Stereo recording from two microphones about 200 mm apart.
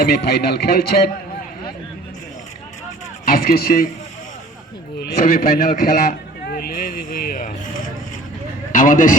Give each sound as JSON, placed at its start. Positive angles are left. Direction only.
{"t": 0.0, "sound": "a man's voice", "side_deg": 55}
{"t": 3.2, "sound": "a man's voice", "side_deg": 50}
{"t": 4.9, "sound": "a man's voice", "side_deg": 50}